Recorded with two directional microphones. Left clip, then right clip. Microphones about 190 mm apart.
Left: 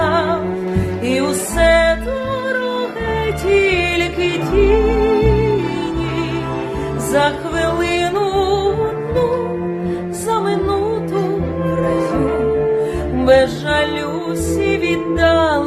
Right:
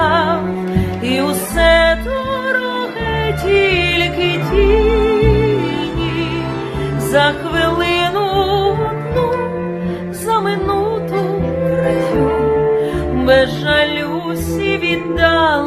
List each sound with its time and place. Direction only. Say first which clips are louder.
0.0 s music: right 2 dB; 15° left (ahead or behind)
3.4 s music: right 1 dB; 15° left (ahead or behind)
7.1 s music: right 2 dB; 15° left (ahead or behind)
10.2 s music: right 2 dB; 15° left (ahead or behind)
12.8 s music: right 1 dB; 20° left (ahead or behind)